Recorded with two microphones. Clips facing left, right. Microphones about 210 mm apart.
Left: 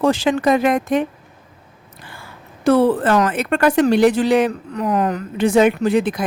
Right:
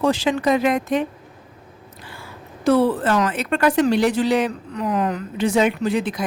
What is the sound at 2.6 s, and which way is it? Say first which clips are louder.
Speech: left 3 dB; 55° left (ahead or behind).